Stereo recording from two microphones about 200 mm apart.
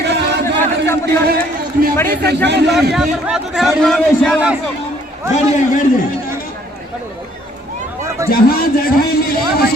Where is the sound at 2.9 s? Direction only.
Centre (ahead or behind).